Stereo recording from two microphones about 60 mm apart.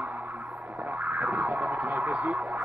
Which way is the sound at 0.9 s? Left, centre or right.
Right.